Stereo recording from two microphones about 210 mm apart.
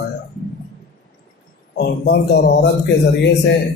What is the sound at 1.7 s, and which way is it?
Speech, 55° left (ahead or behind).